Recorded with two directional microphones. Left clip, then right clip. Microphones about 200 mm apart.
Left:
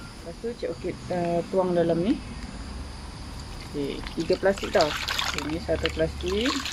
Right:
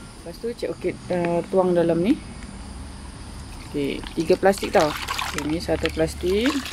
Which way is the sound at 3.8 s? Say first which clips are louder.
Right 5 dB; 45° right (ahead or behind).